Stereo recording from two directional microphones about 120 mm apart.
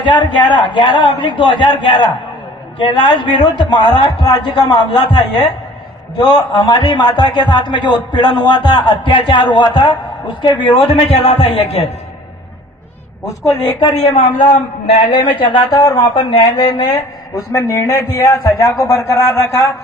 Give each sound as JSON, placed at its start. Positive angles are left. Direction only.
{"t": 0.0, "sound": "a man's voice", "side_deg": 40}
{"t": 13.2, "sound": "a man's voice", "side_deg": 30}
{"t": 13.9, "sound": "a man's voice", "side_deg": 65}
{"t": 15.2, "sound": "a man's voice", "side_deg": 40}
{"t": 16.1, "sound": "a man's voice", "side_deg": 50}
{"t": 17.5, "sound": "a man's voice", "side_deg": 25}